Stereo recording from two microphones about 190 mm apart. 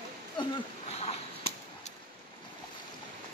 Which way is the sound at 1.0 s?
30° left (ahead or behind).